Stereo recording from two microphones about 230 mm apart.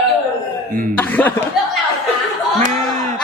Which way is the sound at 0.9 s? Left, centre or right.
Centre.